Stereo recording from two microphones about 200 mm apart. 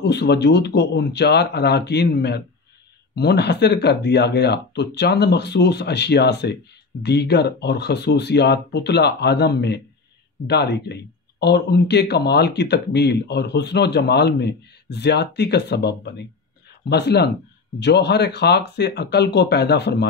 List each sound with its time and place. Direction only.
0.0 s speech: 55° left (ahead or behind)